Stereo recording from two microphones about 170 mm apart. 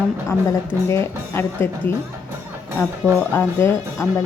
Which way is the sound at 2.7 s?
10° left (ahead or behind).